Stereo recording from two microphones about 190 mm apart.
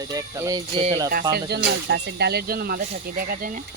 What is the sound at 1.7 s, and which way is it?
Speech, 60° right (ahead or behind).